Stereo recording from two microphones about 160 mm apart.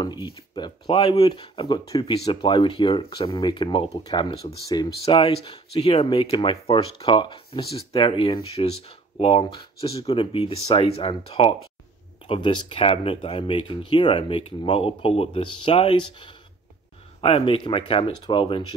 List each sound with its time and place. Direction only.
0.6 s speech: 30° left (ahead or behind)